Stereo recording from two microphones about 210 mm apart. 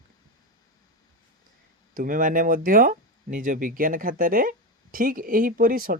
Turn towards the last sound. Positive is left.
turn(degrees=-40)  # may be behind; listen again after turning